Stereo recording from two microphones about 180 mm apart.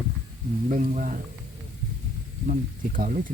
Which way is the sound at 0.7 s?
45° right (ahead or behind).